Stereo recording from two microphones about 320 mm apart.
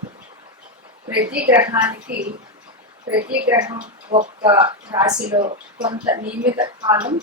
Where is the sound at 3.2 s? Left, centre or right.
Right.